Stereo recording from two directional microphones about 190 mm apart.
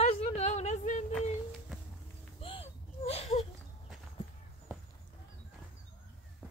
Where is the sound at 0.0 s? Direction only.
35° left (ahead or behind).